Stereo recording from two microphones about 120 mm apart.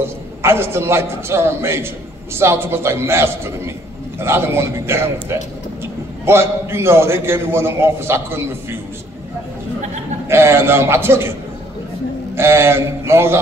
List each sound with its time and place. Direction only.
0.4 s a man's voice: 20° right (ahead or behind)
10.2 s a man's voice: 20° right (ahead or behind)
12.4 s a man's voice: 20° right (ahead or behind)